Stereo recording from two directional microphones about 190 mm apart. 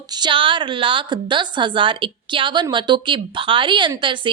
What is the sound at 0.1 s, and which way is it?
A woman's voice, 25° right (ahead or behind).